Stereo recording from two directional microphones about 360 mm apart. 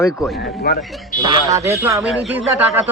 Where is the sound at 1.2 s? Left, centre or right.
Centre.